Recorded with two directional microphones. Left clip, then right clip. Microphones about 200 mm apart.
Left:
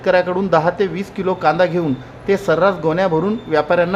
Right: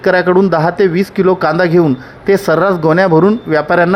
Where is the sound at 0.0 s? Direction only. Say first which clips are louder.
Right 6 dB; 35° right (ahead or behind).